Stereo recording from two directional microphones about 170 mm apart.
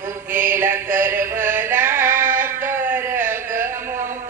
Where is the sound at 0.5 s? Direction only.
15° right (ahead or behind).